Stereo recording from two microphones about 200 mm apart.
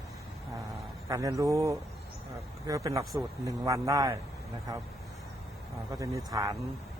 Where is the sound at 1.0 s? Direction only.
15° right (ahead or behind).